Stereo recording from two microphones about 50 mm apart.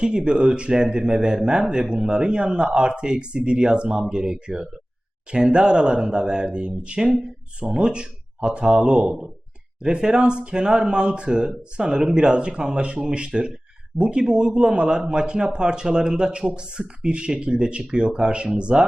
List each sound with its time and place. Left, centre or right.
0.0 s a man's voice: centre